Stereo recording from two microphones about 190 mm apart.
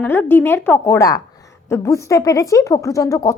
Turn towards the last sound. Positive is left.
turn(degrees=20)  # may be behind; listen again after turning